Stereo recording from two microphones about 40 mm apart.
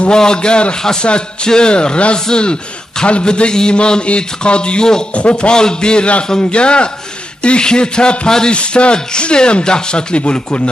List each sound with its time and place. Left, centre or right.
0.0 s a man's voice: centre
8.3 s a sound: centre
8.5 s a man's voice: left